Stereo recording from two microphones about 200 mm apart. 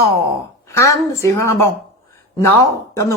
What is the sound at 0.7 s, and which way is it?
Speech, 15° left (ahead or behind).